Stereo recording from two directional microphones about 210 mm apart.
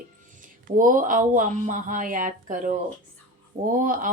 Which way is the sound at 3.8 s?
40° right (ahead or behind).